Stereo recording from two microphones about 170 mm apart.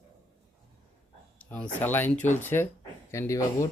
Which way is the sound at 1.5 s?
10° left (ahead or behind).